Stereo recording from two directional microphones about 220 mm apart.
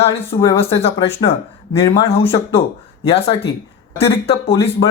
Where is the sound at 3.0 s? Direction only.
25° left (ahead or behind).